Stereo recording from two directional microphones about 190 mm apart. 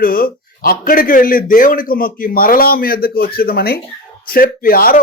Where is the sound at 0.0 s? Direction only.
50° left (ahead or behind).